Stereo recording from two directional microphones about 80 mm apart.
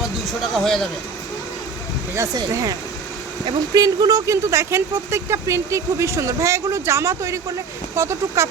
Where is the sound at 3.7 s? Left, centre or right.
Right.